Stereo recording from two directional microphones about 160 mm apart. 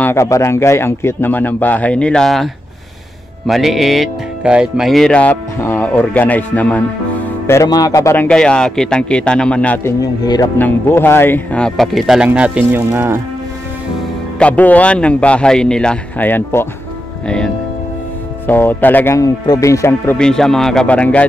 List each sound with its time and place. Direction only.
0.0 s a man's voice: 15° left (ahead or behind)
7.4 s a man's voice: 20° left (ahead or behind)
10.2 s speech: 25° left (ahead or behind)
10.6 s a man's voice: 15° left (ahead or behind); by 13.2 s 15° right (ahead or behind)
14.4 s a man's voice: 10° left (ahead or behind)
18.5 s a man's voice: 15° left (ahead or behind)
20.2 s speech: 5° left (ahead or behind)